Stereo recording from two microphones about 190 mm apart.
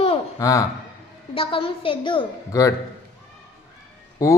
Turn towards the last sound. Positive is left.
turn(degrees=15)  # may be behind; listen again after turning